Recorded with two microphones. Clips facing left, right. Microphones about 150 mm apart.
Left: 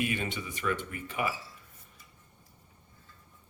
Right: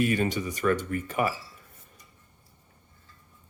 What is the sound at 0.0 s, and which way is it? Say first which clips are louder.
Speech: right 7 dB; 40° right (ahead or behind).